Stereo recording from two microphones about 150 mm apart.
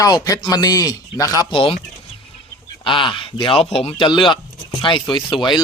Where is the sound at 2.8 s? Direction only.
35° left (ahead or behind).